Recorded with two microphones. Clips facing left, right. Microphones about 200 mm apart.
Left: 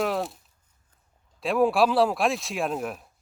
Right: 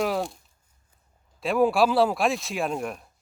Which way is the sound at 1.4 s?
Centre (ahead or behind).